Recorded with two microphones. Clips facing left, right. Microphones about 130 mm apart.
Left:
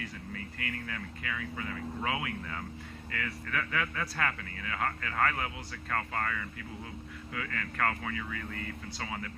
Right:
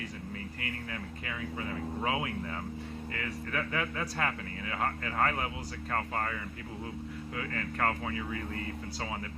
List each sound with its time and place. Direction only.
0.6 s speech: 25° right (ahead or behind)